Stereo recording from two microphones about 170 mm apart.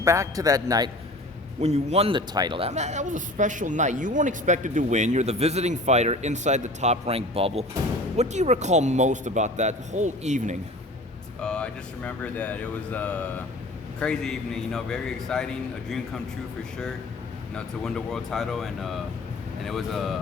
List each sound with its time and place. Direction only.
0.0 s speech: 15° right (ahead or behind)
1.6 s speech: 40° right (ahead or behind)
11.3 s speech: 5° left (ahead or behind)
17.5 s speech: 5° left (ahead or behind)